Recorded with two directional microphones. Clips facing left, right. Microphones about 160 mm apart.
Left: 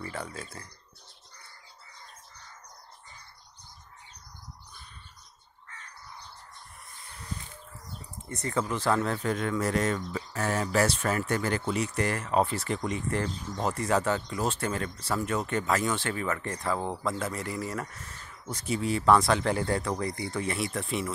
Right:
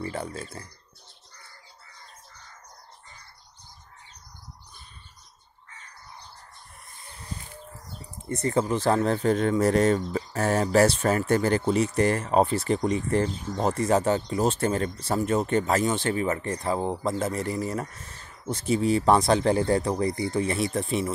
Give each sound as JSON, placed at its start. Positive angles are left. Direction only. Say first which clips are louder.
{"t": 0.0, "sound": "speech", "louder": "right 5 dB", "side_deg": -30}
{"t": 8.5, "sound": "speech", "louder": "right 4 dB", "side_deg": -30}